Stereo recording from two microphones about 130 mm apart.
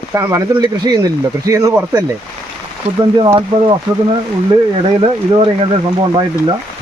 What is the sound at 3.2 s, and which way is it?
Speech, 40° right (ahead or behind).